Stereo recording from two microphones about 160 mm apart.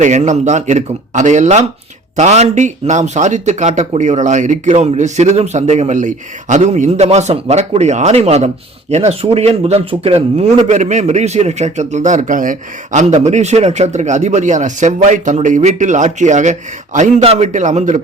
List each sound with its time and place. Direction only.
0.0 s a man's voice: 50° right (ahead or behind)